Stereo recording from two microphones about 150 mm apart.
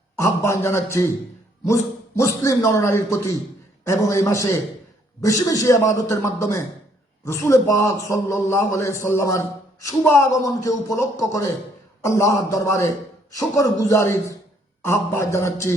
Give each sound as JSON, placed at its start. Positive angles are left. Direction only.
{"t": 0.2, "sound": "a man's voice", "side_deg": 20}